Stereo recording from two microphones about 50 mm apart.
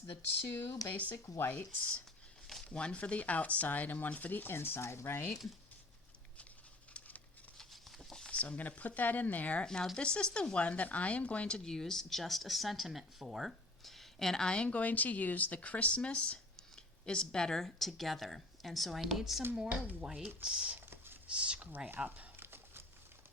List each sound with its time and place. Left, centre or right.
0.4 s speech: left
0.9 s speech: left
1.1 s speech: left
2.6 s speech: left
4.5 s speech: left
7.6 s patter: centre
8.3 s speech: left
10.0 s speech: centre
19.5 s speech: right
20.1 s speech: centre
20.9 s whispering: right
21.2 s speech: right
21.8 s speech: right
22.4 s a sound: right